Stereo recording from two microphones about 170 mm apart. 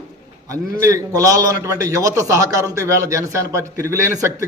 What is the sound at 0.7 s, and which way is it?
A man's voice, 20° right (ahead or behind).